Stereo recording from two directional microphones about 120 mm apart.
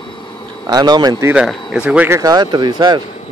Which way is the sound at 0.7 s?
35° right (ahead or behind).